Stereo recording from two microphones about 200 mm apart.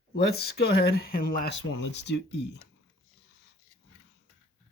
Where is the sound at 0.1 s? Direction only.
55° left (ahead or behind).